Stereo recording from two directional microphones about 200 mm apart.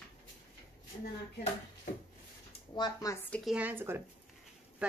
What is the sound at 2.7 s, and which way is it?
Speech, 20° left (ahead or behind).